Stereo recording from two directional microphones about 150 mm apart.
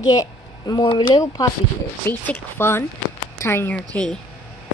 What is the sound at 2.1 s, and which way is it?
Speech, 15° left (ahead or behind).